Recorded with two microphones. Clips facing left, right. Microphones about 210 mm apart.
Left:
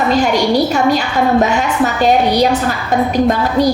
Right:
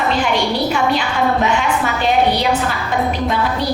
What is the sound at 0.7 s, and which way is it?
A woman's voice, 40° left (ahead or behind).